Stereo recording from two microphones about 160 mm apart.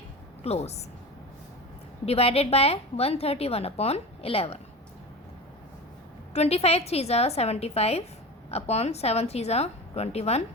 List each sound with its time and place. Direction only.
0.4 s a woman's voice: 40° left (ahead or behind)
2.0 s a woman's voice: 40° left (ahead or behind)
6.3 s a woman's voice: 40° left (ahead or behind)